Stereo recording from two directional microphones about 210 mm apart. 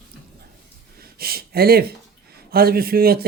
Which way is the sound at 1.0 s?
45° right (ahead or behind).